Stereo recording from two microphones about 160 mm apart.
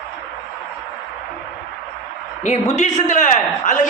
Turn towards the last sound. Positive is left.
turn(degrees=50)  # may be behind; listen again after turning